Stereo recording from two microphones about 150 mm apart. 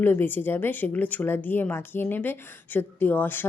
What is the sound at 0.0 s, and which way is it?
A woman's voice, 15° left (ahead or behind).